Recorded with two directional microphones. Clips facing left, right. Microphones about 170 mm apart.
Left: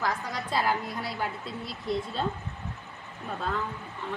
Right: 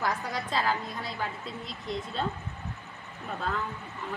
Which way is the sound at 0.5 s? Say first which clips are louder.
Left 3 dB; 10° left (ahead or behind).